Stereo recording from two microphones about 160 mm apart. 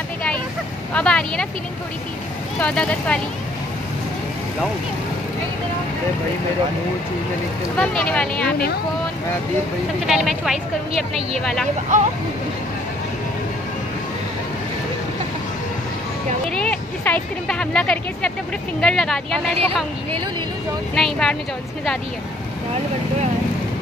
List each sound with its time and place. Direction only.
0.9 s speech: 5° left (ahead or behind)
2.6 s speech: 5° left (ahead or behind)
7.7 s speech: 5° left (ahead or behind)
10.0 s speech: centre (ahead or behind)
10.9 s speech: 40° right (ahead or behind)
11.9 s speech: 50° right (ahead or behind)
16.4 s speech: 5° left (ahead or behind)
20.9 s speech: 5° left (ahead or behind)